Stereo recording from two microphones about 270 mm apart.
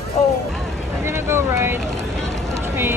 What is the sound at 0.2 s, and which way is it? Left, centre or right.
Vehicle, left.